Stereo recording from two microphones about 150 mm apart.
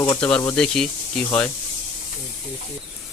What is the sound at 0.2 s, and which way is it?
A man's voice, 5° left (ahead or behind).